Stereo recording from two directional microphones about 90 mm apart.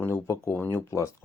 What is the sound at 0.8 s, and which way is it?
Speech, 35° left (ahead or behind).